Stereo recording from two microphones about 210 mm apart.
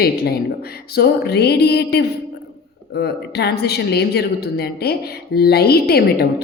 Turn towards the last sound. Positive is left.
turn(degrees=50)  # may be behind; listen again after turning